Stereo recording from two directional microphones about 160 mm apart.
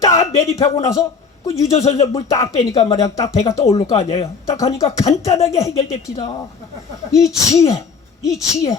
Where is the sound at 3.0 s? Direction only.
20° left (ahead or behind).